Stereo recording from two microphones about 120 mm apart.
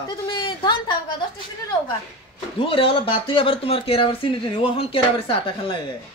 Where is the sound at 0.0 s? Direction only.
40° left (ahead or behind).